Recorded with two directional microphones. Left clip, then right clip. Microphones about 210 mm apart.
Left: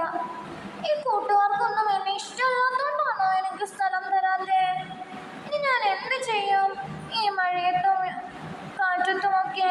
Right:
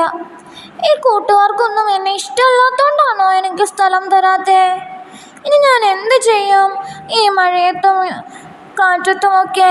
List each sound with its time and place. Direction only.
0.8 s child singing: 50° right (ahead or behind)
5.5 s speech: 55° right (ahead or behind)
8.8 s child singing: 50° right (ahead or behind)